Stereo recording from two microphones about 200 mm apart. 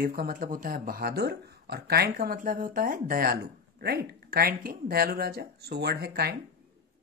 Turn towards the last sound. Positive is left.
turn(degrees=-50)  # may be behind; listen again after turning